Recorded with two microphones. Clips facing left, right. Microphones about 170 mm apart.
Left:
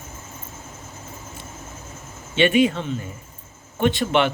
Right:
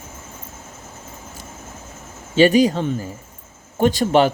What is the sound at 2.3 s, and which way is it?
Speech, 35° right (ahead or behind).